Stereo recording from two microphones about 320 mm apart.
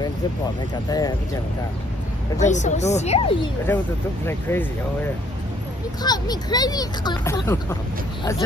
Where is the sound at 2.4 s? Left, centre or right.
Left.